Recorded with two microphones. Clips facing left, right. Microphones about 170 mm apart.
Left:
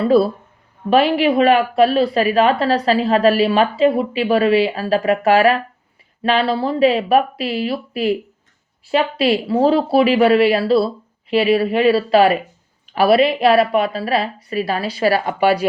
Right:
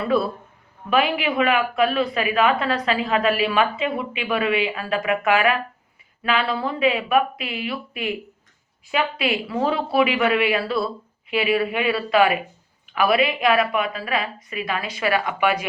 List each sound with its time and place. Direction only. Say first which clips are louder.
0.0 s speech: left 7 dB; 30° left (ahead or behind)